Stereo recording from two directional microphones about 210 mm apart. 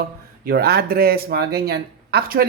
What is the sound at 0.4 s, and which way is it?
Speech, 50° right (ahead or behind).